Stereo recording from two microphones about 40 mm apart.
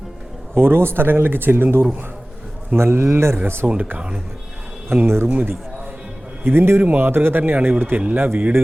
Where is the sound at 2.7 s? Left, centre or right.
Right.